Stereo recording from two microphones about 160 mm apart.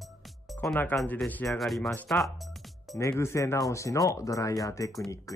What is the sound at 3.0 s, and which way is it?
Speech, 20° left (ahead or behind).